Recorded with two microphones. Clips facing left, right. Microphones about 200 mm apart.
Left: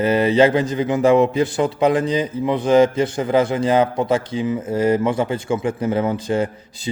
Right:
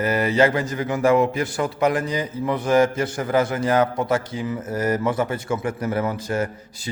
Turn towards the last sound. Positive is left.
turn(degrees=25)  # may be behind; listen again after turning